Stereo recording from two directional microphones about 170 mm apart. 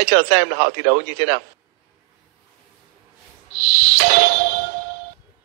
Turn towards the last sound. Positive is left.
turn(degrees=-65)  # may be behind; listen again after turning